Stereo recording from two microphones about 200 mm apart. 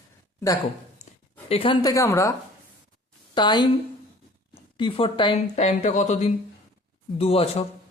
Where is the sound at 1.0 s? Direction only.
40° left (ahead or behind).